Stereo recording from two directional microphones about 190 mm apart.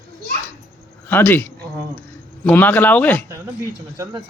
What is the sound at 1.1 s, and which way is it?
A man's voice, 10° left (ahead or behind).